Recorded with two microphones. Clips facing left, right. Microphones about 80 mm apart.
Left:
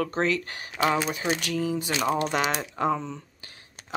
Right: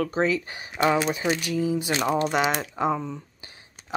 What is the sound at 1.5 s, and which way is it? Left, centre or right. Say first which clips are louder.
Speech: right 3 dB; centre.